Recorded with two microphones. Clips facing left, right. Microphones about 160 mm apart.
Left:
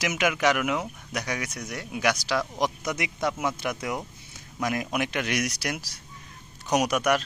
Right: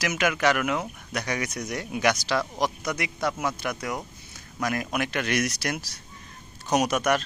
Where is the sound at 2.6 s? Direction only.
20° left (ahead or behind).